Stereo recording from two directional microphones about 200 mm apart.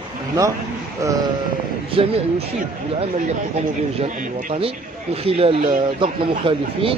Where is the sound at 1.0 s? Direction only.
15° right (ahead or behind).